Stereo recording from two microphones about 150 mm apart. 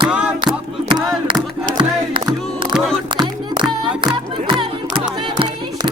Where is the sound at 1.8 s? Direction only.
30° right (ahead or behind).